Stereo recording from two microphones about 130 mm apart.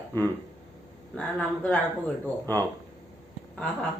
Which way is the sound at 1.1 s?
10° left (ahead or behind).